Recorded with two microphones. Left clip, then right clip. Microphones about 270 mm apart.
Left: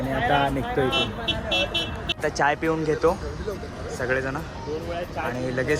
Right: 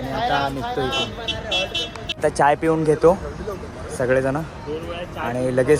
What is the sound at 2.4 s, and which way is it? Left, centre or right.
A man's voice, centre.